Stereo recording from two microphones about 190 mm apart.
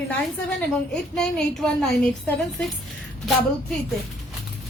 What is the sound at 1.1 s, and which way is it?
A woman's voice, 5° left (ahead or behind).